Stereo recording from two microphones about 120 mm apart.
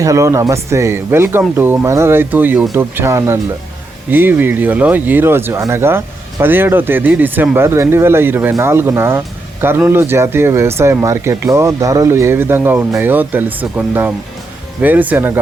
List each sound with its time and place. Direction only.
0.0 s speech: 25° right (ahead or behind)